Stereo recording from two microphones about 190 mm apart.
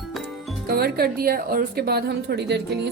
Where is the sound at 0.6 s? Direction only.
55° right (ahead or behind).